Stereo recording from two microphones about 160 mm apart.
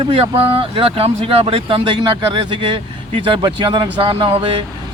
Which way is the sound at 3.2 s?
30° right (ahead or behind).